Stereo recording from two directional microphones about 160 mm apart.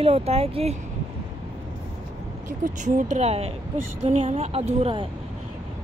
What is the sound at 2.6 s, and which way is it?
Speech, 50° right (ahead or behind).